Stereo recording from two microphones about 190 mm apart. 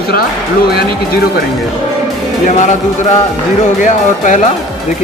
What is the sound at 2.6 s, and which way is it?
Speech, 40° left (ahead or behind).